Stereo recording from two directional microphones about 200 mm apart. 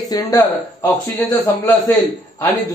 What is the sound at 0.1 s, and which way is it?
Speech, 20° left (ahead or behind).